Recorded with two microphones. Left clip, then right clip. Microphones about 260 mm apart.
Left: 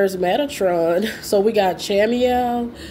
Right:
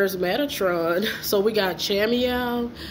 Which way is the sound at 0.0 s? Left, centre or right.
Left.